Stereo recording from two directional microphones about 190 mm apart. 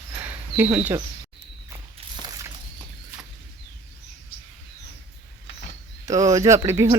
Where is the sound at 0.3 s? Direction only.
10° right (ahead or behind).